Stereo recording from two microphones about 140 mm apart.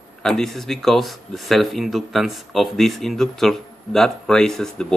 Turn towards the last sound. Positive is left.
turn(degrees=5)  # may be behind; listen again after turning